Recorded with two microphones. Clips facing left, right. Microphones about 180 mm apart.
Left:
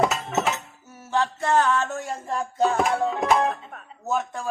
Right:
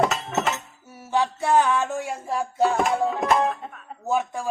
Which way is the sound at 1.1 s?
10° right (ahead or behind).